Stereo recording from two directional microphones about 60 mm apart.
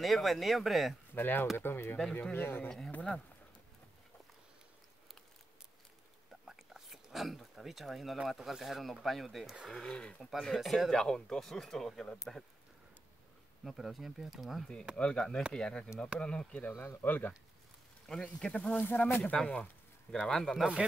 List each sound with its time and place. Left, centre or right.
0.0 s speech: centre
1.1 s speech: left
2.9 s speech: left
6.4 s a sound: centre
8.3 s speech: centre
9.9 s speech: centre
13.7 s speech: centre
15.0 s speech: centre
16.7 s speech: left
18.0 s speech: centre
18.8 s speech: left
19.3 s speech: centre